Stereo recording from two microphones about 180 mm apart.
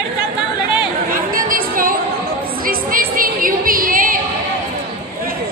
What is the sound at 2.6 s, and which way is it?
Music, 55° right (ahead or behind).